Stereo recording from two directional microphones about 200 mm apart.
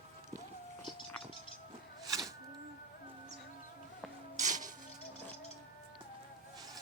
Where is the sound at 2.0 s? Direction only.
15° right (ahead or behind).